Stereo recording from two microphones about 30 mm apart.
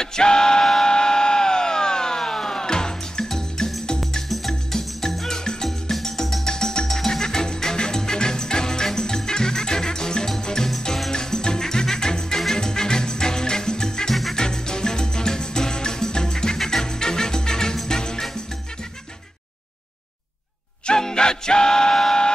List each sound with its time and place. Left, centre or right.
0.0 s a sound: left
0.9 s music: left
5.3 s music: left
5.7 s music: centre; by 18.2 s left
21.0 s music: left